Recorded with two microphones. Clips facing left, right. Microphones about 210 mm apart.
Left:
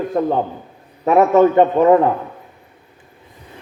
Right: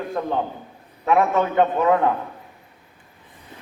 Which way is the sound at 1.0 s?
40° left (ahead or behind).